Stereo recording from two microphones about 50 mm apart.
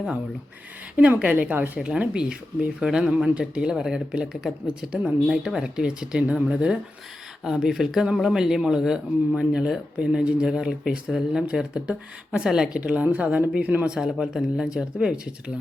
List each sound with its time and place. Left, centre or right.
1.2 s a woman's voice: right
1.8 s speech: centre
5.3 s speech: centre
5.5 s speech: centre
12.8 s speech: right
13.9 s speech: centre